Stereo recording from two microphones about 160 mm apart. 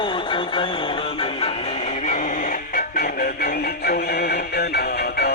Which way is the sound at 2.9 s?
75° left (ahead or behind).